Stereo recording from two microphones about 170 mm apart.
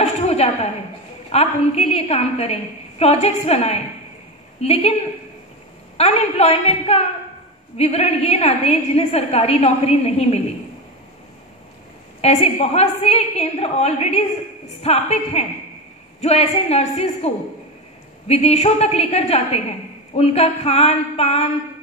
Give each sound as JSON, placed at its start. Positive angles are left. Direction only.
{"t": 0.0, "sound": "a sound", "side_deg": 40}
{"t": 1.3, "sound": "a woman's voice", "side_deg": 40}
{"t": 5.9, "sound": "a woman's voice", "side_deg": 40}
{"t": 12.2, "sound": "a woman's voice", "side_deg": 35}